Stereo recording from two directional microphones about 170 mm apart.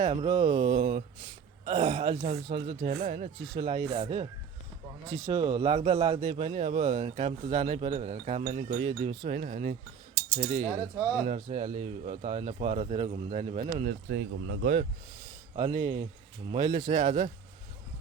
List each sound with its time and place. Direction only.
0.0 s mantra: 30° right (ahead or behind)
0.8 s speech: 30° right (ahead or behind)
5.0 s speech: 20° right (ahead or behind); by 10.7 s 40° right (ahead or behind)
10.8 s mantra: 20° right (ahead or behind)
11.2 s speech: 40° right (ahead or behind)
13.8 s speech: 80° right
15.5 s mantra: 25° right (ahead or behind)
16.5 s speech: 30° right (ahead or behind)
16.8 s a man's voice: 45° right (ahead or behind)